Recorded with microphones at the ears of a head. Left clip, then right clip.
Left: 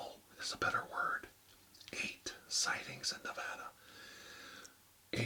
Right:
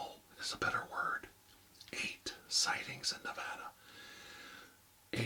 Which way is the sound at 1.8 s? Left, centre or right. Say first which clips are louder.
Right 1 dB; centre.